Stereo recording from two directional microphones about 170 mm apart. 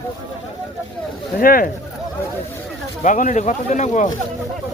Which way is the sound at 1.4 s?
55° left (ahead or behind).